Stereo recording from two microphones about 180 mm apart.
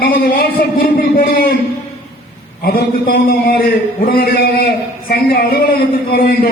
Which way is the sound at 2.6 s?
55° left (ahead or behind).